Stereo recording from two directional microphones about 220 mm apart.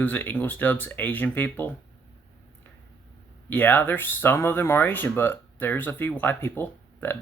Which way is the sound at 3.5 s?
10° left (ahead or behind).